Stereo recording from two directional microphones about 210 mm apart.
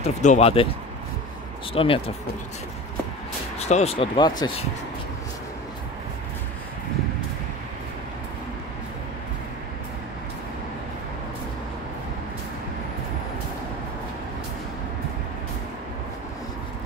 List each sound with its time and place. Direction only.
0.0 s speech: 30° left (ahead or behind)
1.7 s speech: 25° left (ahead or behind)
3.5 s speech: 30° left (ahead or behind)